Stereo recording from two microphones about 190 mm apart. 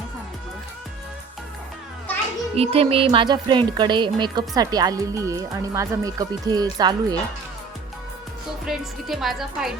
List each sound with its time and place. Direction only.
2.6 s speech: 30° right (ahead or behind)
8.6 s a woman's voice: centre (ahead or behind)